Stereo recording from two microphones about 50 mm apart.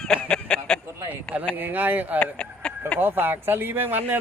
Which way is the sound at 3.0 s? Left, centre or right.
Right.